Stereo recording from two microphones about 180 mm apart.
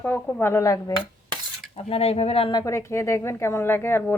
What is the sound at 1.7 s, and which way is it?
Speech, 35° left (ahead or behind).